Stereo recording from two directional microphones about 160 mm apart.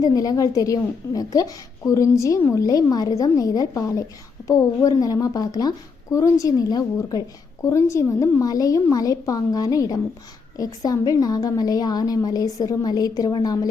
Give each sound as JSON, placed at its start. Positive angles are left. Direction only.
{"t": 0.0, "sound": "a woman's voice", "side_deg": 25}